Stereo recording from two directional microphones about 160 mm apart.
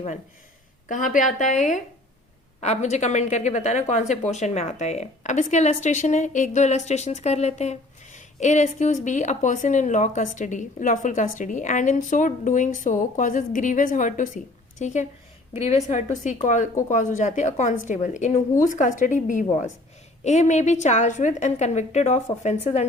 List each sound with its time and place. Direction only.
0.9 s speech: 55° left (ahead or behind)